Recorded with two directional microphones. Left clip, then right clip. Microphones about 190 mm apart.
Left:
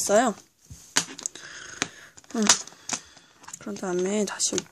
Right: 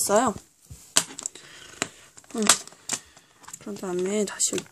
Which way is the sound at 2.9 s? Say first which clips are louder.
Even; 5° left (ahead or behind).